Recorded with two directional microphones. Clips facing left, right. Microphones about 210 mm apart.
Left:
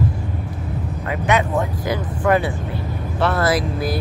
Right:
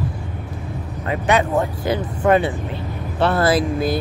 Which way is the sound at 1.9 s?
25° right (ahead or behind).